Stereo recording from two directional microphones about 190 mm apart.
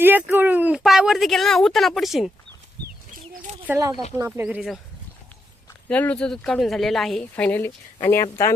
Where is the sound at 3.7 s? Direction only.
15° right (ahead or behind).